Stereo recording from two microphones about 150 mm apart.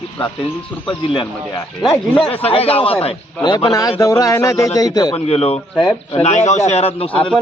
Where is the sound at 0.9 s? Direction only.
35° left (ahead or behind).